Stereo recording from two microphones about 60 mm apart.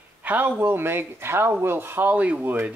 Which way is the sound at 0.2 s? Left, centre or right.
Right.